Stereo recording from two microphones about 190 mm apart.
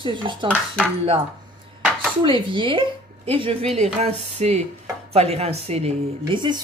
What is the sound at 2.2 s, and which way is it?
Speech, 25° right (ahead or behind).